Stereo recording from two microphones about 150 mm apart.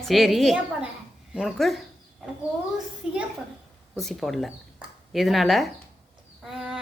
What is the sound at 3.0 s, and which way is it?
A woman's voice, 5° right (ahead or behind).